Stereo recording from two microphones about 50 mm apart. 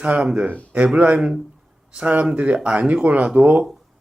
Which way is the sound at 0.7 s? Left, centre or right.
Right.